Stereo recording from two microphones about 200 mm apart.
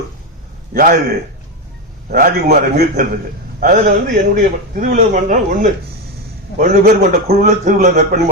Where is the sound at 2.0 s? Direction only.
45° right (ahead or behind).